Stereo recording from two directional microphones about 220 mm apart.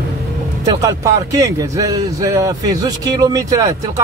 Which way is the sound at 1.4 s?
15° right (ahead or behind).